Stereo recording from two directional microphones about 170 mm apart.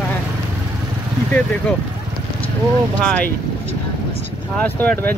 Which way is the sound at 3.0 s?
5° left (ahead or behind).